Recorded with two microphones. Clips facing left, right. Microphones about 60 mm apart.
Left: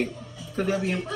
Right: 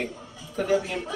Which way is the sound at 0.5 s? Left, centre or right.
Left.